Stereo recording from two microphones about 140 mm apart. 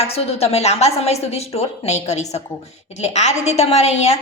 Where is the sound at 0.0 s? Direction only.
45° left (ahead or behind).